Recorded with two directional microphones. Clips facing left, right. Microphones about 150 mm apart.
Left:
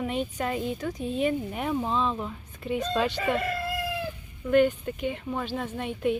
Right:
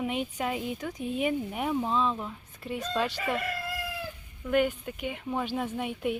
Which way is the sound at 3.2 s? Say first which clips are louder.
Left 4 dB; 25° left (ahead or behind).